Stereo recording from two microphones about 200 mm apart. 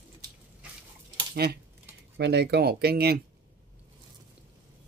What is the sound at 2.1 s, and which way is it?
Speech, 55° right (ahead or behind).